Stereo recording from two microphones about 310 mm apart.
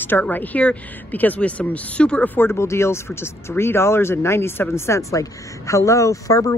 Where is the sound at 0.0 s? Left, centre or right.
Centre.